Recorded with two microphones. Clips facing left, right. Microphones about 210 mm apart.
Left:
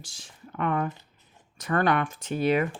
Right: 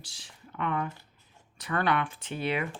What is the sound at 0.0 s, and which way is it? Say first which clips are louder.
Speech: left 4 dB; 45° left (ahead or behind).